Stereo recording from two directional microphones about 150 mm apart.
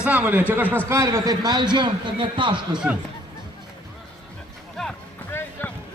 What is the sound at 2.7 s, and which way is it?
Speech, 5° right (ahead or behind).